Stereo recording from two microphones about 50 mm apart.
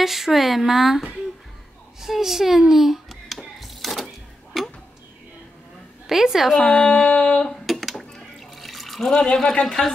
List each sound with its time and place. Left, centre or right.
0.0 s speech: centre
2.0 s a sound: centre
6.0 s a woman's voice: centre
6.5 s speech: centre
6.8 s a sound: left
7.4 s drip: centre